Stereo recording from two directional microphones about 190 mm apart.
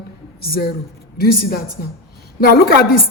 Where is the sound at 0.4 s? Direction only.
50° left (ahead or behind).